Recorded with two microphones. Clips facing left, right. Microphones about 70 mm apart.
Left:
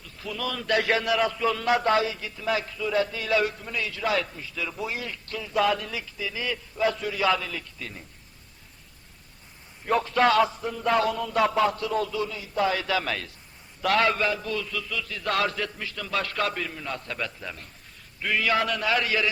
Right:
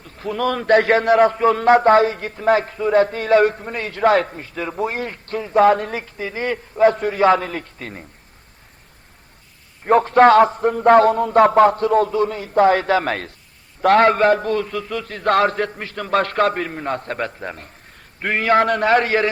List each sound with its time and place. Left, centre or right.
0.0 s a man's voice: right
9.8 s a man's voice: right